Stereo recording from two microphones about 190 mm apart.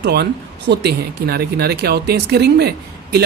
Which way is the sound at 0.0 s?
60° right (ahead or behind).